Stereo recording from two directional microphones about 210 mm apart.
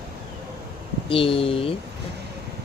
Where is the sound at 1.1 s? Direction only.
25° left (ahead or behind).